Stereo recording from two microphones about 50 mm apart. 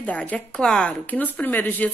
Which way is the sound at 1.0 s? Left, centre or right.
Left.